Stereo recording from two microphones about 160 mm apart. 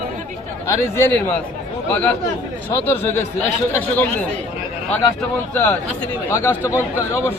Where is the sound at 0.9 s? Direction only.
15° left (ahead or behind).